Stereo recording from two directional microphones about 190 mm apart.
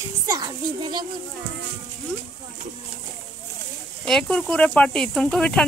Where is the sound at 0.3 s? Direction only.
20° right (ahead or behind).